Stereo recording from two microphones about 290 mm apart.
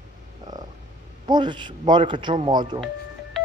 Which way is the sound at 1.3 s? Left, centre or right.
Centre.